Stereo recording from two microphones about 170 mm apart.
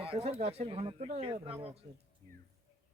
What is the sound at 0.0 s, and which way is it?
Speech, 35° right (ahead or behind).